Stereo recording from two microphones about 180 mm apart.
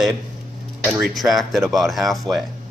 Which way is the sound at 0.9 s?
15° right (ahead or behind).